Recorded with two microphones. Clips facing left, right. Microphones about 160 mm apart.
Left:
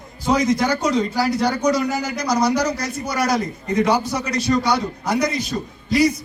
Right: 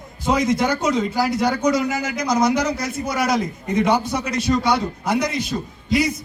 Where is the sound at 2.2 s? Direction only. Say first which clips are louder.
Right 1 dB; 25° right (ahead or behind).